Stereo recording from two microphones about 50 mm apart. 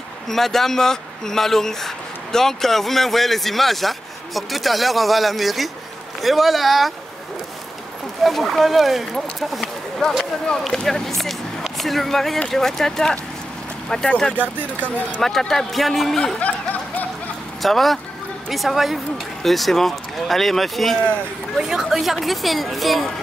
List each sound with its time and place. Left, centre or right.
0.3 s speech: centre
8.2 s speech: centre
14.4 s speech: right
15.2 s speech: centre
16.3 s a sound: left
17.6 s speech: centre
21.5 s speech: centre